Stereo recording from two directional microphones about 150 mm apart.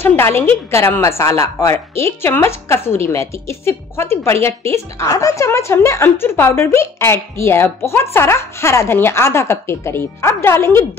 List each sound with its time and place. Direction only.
0.0 s a woman's voice: 15° left (ahead or behind)